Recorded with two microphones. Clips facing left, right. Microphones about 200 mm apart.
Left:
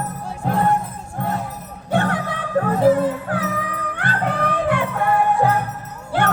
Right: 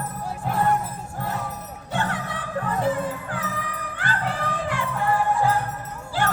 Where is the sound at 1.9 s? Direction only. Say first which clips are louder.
Left 7 dB; 60° left (ahead or behind).